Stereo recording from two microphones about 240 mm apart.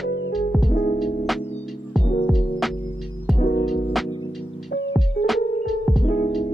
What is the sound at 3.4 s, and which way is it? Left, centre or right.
Music, left.